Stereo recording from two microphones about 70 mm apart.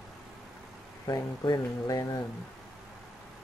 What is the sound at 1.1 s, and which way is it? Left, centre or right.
Speech, left.